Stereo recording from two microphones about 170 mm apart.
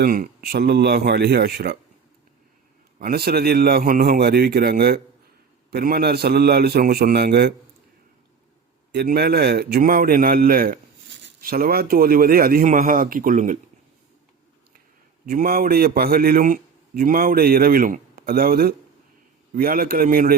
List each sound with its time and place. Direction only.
0.0 s speech: 60° right (ahead or behind)
3.0 s a man's voice: 65° right (ahead or behind)
8.9 s a man's voice: 70° right (ahead or behind); by 13.6 s 50° right (ahead or behind)
15.3 s a man's voice: 60° right (ahead or behind)